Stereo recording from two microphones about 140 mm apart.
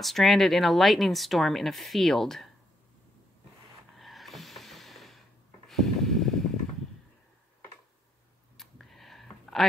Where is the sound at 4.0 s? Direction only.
Centre (ahead or behind).